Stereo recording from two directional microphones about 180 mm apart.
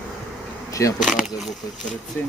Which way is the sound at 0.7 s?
20° left (ahead or behind).